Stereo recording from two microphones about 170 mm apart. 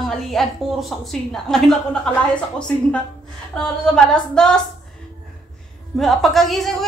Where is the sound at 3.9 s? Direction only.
5° left (ahead or behind).